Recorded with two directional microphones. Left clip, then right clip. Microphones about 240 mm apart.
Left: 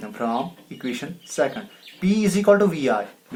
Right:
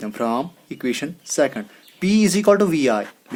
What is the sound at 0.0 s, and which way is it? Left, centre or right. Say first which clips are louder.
Speech: right 3 dB; right.